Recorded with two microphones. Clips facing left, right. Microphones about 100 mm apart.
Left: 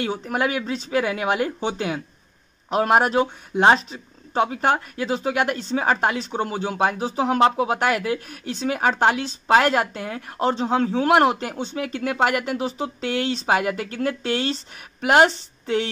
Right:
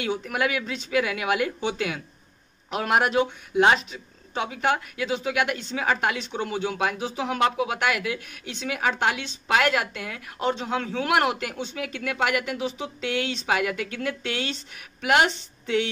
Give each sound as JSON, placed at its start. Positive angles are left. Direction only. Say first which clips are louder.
{"t": 0.0, "sound": "speech", "louder": "left 2 dB", "side_deg": 35}